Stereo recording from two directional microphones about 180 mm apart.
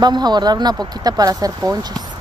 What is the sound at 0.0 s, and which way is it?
Speech, 25° right (ahead or behind).